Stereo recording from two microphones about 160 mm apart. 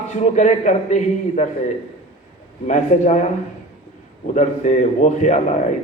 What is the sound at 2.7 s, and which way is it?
Speech, 45° left (ahead or behind).